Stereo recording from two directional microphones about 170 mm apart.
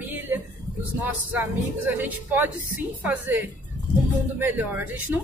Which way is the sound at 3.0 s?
10° right (ahead or behind).